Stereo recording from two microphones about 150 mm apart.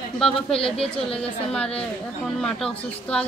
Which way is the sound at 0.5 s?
40° left (ahead or behind).